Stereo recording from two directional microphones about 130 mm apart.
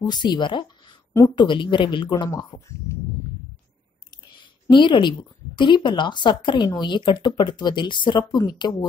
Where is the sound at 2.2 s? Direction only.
25° left (ahead or behind).